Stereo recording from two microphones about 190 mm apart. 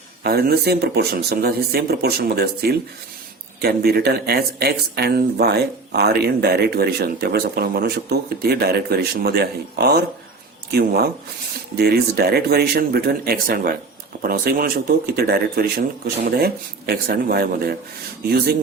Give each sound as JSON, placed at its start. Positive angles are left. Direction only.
{"t": 0.2, "sound": "speech", "side_deg": -55}